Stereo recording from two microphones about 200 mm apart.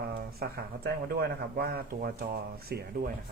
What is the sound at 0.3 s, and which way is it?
Speech, 50° right (ahead or behind).